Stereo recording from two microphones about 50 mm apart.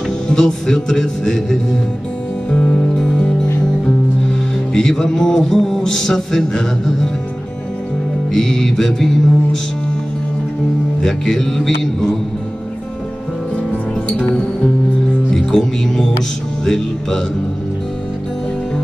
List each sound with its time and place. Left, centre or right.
0.3 s music: centre
2.5 s music: left
8.3 s music: centre
11.0 s music: centre
14.2 s music: centre
15.3 s speech: centre
16.6 s music: centre